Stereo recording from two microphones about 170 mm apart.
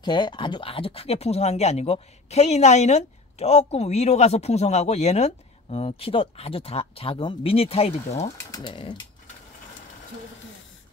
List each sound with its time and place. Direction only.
0.0 s speech: 30° left (ahead or behind)
8.5 s speech: 25° left (ahead or behind)